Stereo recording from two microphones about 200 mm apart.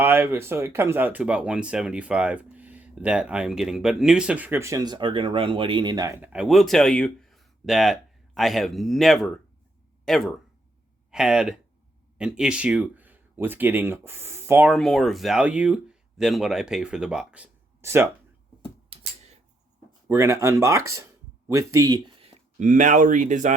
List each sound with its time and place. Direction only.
0.0 s speech: 10° right (ahead or behind)
14.7 s speech: centre (ahead or behind)
20.1 s speech: 15° right (ahead or behind)
22.5 s speech: 40° right (ahead or behind)